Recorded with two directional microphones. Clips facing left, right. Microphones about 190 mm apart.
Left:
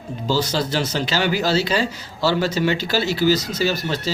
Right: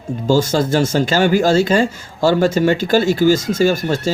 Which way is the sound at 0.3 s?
50° right (ahead or behind).